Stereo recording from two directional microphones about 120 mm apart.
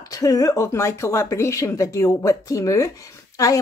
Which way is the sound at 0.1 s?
30° left (ahead or behind).